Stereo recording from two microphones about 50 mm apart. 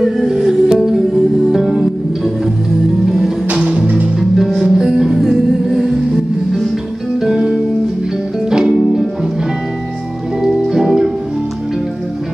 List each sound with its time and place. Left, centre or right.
0.0 s music: centre
3.5 s music: right
4.2 s music: centre
7.2 s music: centre
10.4 s music: centre